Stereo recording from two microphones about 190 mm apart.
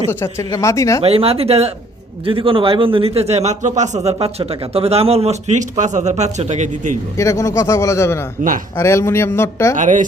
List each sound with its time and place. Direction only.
0.1 s speech: 15° left (ahead or behind)
1.0 s a man's voice: 30° right (ahead or behind)
7.2 s speech: 15° left (ahead or behind)
9.7 s a man's voice: 40° right (ahead or behind)